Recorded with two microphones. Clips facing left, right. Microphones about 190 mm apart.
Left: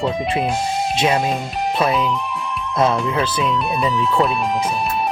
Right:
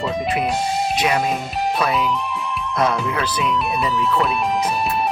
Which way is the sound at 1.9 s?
Centre (ahead or behind).